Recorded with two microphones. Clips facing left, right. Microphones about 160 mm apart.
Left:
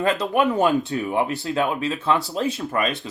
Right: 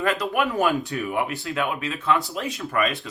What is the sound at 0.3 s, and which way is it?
Speech, 20° left (ahead or behind).